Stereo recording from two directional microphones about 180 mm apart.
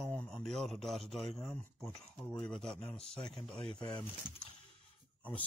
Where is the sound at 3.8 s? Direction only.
25° left (ahead or behind).